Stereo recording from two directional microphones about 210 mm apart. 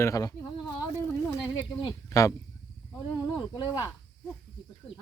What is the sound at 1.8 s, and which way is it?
Speech, 15° left (ahead or behind).